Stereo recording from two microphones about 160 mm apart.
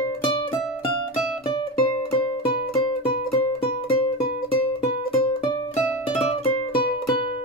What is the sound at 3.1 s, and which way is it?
Music, 35° left (ahead or behind).